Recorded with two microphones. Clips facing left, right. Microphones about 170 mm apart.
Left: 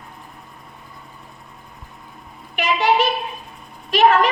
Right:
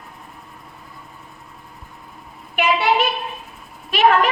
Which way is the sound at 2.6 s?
40° left (ahead or behind).